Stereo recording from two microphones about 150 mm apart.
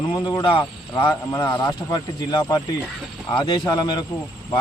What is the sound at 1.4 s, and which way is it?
Speech, 30° left (ahead or behind).